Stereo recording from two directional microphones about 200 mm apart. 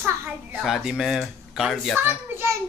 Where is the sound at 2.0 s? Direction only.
10° right (ahead or behind).